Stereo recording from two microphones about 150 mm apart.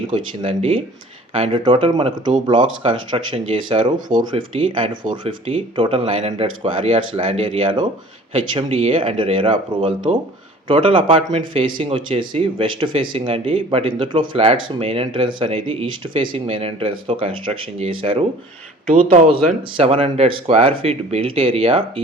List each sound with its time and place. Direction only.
0.1 s speech: 40° right (ahead or behind)